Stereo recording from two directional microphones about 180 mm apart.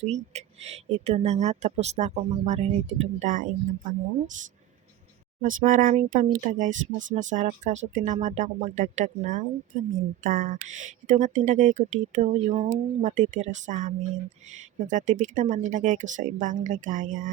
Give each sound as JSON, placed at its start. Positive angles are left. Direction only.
{"t": 0.0, "sound": "speech", "side_deg": -35}
{"t": 5.4, "sound": "speech", "side_deg": -45}